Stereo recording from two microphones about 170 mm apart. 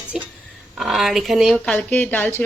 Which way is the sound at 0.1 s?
5° right (ahead or behind).